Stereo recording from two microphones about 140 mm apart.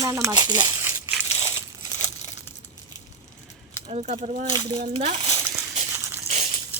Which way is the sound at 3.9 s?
50° right (ahead or behind).